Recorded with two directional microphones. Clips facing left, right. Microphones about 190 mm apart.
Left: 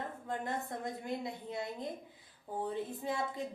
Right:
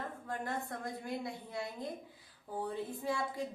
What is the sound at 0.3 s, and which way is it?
A woman's voice, 20° left (ahead or behind).